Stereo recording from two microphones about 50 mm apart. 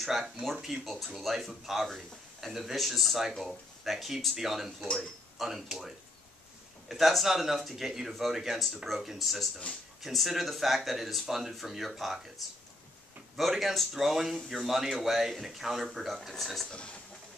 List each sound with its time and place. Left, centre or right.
0.0 s speech: centre
16.7 s speech: left